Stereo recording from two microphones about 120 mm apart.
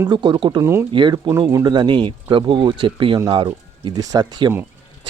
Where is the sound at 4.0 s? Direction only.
30° right (ahead or behind).